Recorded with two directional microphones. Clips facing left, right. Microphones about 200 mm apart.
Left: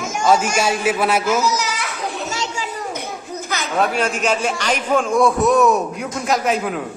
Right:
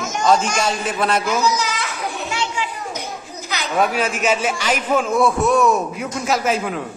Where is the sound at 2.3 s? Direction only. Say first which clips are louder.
Right 1 dB; 40° left (ahead or behind).